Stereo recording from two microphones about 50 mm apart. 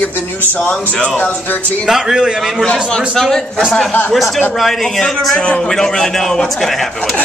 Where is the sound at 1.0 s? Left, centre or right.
Left.